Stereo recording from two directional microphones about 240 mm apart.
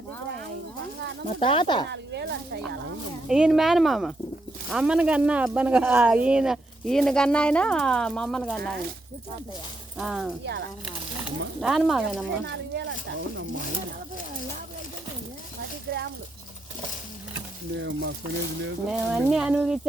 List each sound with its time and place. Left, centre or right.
1.3 s speech: left
1.9 s speech: right
3.2 s speech: centre
10.0 s speech: centre
10.4 s speech: right
11.6 s speech: centre
12.5 s speech: right
15.9 s speech: right
17.7 s speech: right
18.9 s speech: centre